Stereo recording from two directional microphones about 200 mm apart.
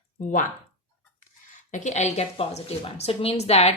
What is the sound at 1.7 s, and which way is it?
A woman's voice, 35° left (ahead or behind).